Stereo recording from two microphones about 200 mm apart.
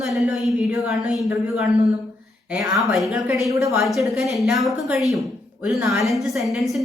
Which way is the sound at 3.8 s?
Centre (ahead or behind).